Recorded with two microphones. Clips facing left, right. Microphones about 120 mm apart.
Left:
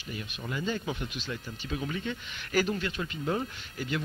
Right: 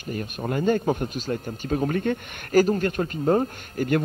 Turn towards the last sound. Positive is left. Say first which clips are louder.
# right 10 dB
turn(degrees=-50)  # may be behind; listen again after turning